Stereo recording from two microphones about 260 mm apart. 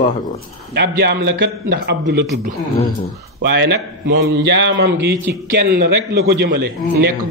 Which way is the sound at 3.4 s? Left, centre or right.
Right.